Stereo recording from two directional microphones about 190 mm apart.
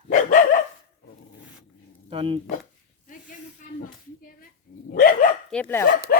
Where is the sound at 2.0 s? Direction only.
30° right (ahead or behind).